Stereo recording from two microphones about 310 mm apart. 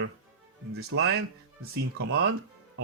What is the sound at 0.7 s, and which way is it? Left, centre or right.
Speech, right.